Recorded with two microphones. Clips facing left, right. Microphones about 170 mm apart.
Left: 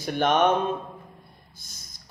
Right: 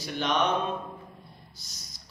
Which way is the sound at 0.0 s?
50° left (ahead or behind).